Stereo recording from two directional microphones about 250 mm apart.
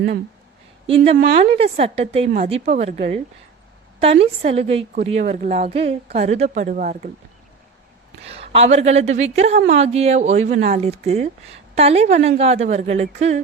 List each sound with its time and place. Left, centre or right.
0.9 s a woman's voice: right
8.2 s a woman's voice: right